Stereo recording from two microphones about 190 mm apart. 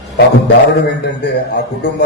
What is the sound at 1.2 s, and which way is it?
Mantra, 60° left (ahead or behind).